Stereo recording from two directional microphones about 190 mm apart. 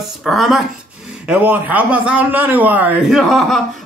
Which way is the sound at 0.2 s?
Centre (ahead or behind).